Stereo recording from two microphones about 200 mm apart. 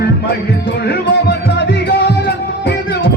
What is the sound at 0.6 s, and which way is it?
Music, 55° left (ahead or behind).